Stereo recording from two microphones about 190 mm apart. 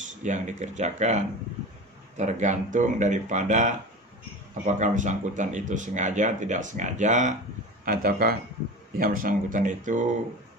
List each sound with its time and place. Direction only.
0.2 s speech: 40° right (ahead or behind)